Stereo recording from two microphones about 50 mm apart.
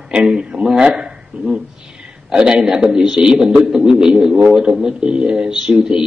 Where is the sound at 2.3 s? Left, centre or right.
Centre.